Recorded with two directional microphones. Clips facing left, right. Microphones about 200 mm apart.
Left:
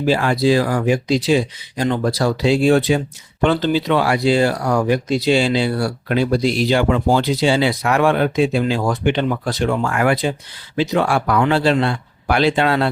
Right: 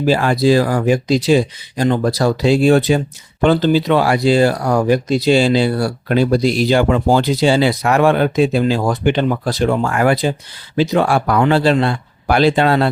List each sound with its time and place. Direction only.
0.0 s speech: 40° right (ahead or behind)